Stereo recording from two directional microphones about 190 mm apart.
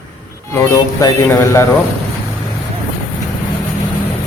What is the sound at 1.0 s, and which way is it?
Speech, 15° left (ahead or behind).